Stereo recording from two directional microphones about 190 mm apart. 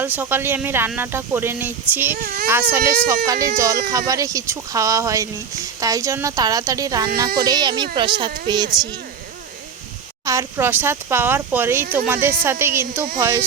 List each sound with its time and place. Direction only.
0.0 s speech: 10° right (ahead or behind)
2.1 s a child's voice: 45° right (ahead or behind)
2.5 s speech: 10° right (ahead or behind)
10.2 s speech: 15° right (ahead or behind)